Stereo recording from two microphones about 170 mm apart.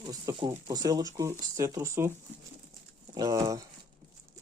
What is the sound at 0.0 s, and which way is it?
Speech, 25° right (ahead or behind).